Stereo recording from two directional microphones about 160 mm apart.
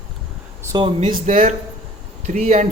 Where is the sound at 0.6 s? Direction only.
25° right (ahead or behind).